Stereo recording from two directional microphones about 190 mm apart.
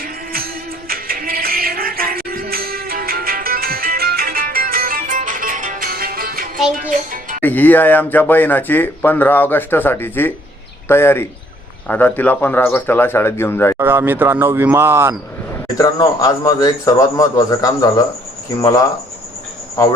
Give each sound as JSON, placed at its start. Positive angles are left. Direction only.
{"t": 0.0, "sound": "music", "side_deg": -50}
{"t": 7.4, "sound": "speech", "side_deg": 10}
{"t": 13.7, "sound": "speech", "side_deg": -10}
{"t": 15.8, "sound": "a man's voice", "side_deg": 20}